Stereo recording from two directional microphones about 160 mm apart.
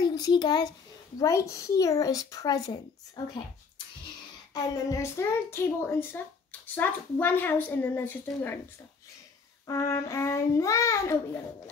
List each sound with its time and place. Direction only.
0.0 s a child's voice: 25° left (ahead or behind)
4.6 s a woman's voice: 20° left (ahead or behind)
9.7 s a woman's voice: 20° left (ahead or behind)